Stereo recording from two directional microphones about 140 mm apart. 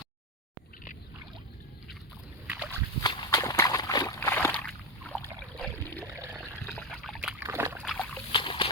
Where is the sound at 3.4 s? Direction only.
25° left (ahead or behind).